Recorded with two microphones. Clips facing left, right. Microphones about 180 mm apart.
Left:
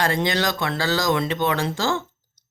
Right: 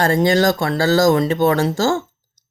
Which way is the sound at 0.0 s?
45° right (ahead or behind).